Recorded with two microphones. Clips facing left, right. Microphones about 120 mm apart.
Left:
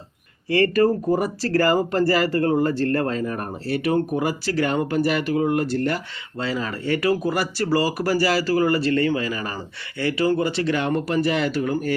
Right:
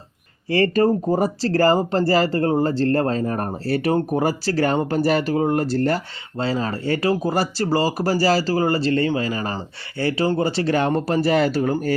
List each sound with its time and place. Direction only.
0.5 s speech: 30° right (ahead or behind)